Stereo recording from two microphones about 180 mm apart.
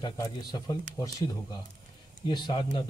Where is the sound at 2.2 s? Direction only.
25° left (ahead or behind).